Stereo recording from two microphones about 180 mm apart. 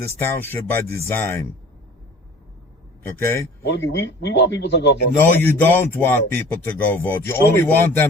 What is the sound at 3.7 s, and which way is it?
Speech, 70° left (ahead or behind).